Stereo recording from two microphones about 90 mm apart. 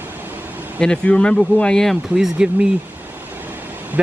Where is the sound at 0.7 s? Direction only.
10° left (ahead or behind).